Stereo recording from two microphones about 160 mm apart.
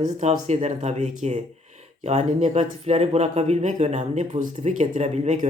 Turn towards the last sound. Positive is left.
turn(degrees=-45)  # may be behind; listen again after turning